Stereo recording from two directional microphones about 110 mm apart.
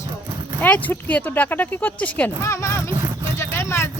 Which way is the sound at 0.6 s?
15° left (ahead or behind).